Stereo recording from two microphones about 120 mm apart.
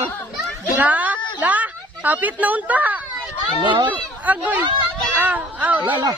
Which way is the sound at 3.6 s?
40° right (ahead or behind).